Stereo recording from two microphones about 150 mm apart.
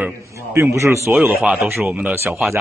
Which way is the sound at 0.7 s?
20° right (ahead or behind).